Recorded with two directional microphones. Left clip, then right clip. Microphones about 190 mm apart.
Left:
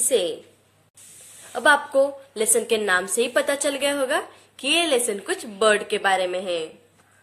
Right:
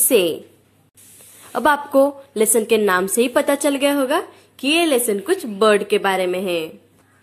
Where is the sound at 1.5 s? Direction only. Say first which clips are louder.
Right 2 dB; 30° right (ahead or behind).